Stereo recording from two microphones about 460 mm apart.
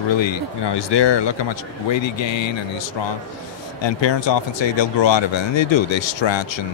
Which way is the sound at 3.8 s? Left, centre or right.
Left.